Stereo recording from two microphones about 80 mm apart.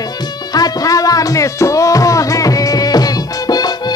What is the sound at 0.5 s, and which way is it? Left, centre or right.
Music, left.